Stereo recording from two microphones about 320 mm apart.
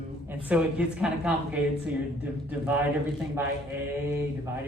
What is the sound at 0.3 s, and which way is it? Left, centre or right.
Speech, centre.